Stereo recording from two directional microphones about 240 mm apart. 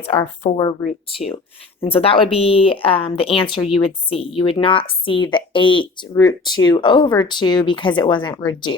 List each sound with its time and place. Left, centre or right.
0.0 s speech: left
1.8 s speech: left